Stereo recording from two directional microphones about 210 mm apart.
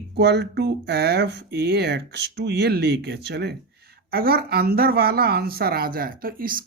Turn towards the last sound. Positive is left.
turn(degrees=-45)  # may be behind; listen again after turning